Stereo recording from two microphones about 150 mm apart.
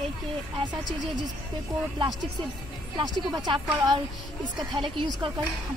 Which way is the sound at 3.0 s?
25° right (ahead or behind).